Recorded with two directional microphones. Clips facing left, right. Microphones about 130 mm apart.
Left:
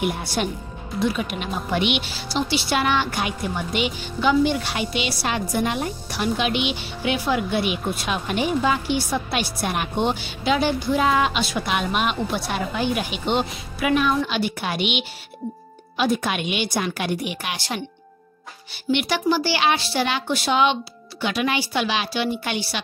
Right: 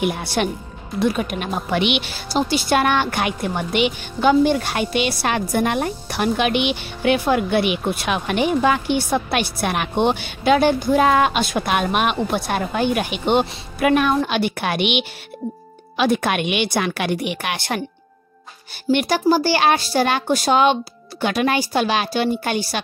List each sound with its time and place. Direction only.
0.0 s a woman's voice: 65° right (ahead or behind)
0.9 s speech: 50° right (ahead or behind)
1.7 s speech: 85° right
2.1 s a woman's voice: 45° right (ahead or behind)
18.9 s speech: 45° right (ahead or behind)